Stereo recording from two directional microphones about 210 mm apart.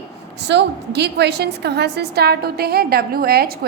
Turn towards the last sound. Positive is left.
turn(degrees=-45)  # may be behind; listen again after turning